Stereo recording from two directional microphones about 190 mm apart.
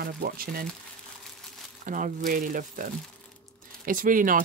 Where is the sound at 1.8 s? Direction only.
45° right (ahead or behind).